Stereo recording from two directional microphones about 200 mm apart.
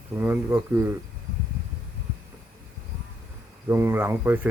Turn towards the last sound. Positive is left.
turn(degrees=-10)  # may be behind; listen again after turning